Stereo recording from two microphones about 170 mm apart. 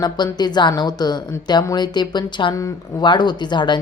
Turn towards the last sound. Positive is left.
turn(degrees=25)  # may be behind; listen again after turning